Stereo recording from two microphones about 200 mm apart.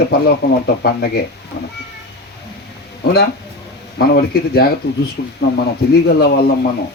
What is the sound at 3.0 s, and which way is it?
A man's voice, 50° left (ahead or behind).